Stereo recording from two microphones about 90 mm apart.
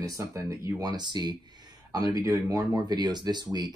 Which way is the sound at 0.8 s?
50° right (ahead or behind).